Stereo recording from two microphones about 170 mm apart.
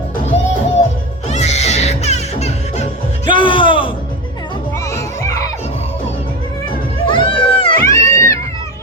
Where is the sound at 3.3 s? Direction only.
30° left (ahead or behind).